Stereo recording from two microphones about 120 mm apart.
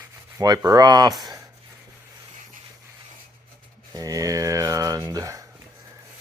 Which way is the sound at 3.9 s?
30° right (ahead or behind).